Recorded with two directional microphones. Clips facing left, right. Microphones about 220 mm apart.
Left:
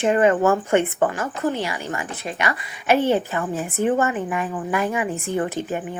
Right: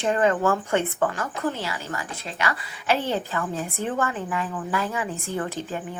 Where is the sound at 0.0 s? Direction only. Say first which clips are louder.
Left 4 dB; 15° left (ahead or behind).